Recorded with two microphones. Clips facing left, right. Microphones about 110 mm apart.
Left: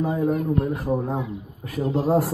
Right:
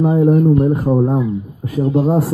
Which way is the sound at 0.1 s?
40° right (ahead or behind).